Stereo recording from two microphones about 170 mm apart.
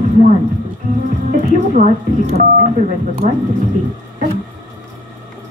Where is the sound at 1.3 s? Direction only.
50° right (ahead or behind).